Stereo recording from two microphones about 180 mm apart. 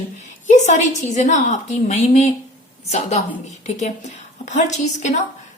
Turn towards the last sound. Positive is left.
turn(degrees=40)  # may be behind; listen again after turning